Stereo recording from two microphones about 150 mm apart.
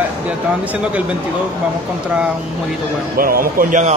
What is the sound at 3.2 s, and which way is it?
Speech, 75° right (ahead or behind).